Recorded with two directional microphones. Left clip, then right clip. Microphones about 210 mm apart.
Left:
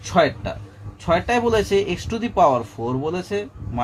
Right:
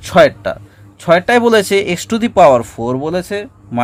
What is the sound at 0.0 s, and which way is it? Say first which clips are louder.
Speech: right 9 dB; 55° right (ahead or behind).